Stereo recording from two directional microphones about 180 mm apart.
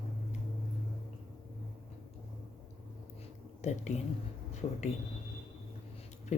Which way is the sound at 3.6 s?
40° left (ahead or behind).